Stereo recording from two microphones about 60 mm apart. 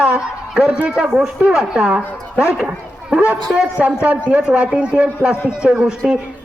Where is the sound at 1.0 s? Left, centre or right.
Centre.